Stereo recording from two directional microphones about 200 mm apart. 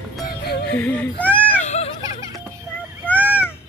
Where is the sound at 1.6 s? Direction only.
35° left (ahead or behind).